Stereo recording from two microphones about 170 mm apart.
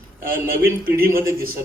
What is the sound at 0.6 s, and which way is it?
Speech, 60° right (ahead or behind).